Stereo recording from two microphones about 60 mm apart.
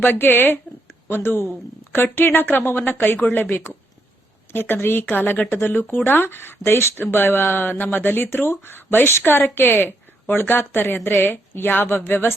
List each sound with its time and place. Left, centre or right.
0.0 s speech: left
4.7 s speech: left